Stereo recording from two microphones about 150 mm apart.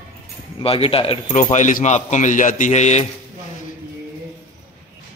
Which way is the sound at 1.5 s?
55° left (ahead or behind).